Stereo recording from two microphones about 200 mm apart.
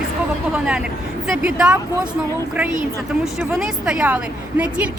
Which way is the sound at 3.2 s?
Centre (ahead or behind).